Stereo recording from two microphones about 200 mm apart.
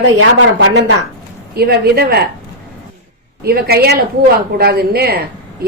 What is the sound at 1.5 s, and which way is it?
Speech, 50° right (ahead or behind).